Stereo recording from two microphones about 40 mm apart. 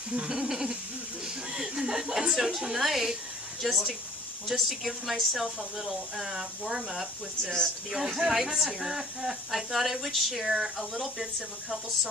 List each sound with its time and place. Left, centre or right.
0.3 s a woman's voice: centre